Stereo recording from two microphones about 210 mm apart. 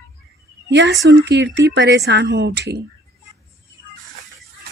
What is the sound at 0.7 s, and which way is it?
Speech, 55° right (ahead or behind).